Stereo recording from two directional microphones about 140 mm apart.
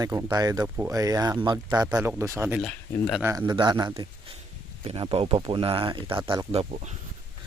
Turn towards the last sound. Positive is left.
turn(degrees=-50)  # may be behind; listen again after turning